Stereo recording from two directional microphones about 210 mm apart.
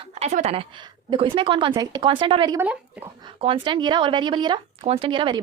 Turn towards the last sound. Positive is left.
turn(degrees=-25)  # may be behind; listen again after turning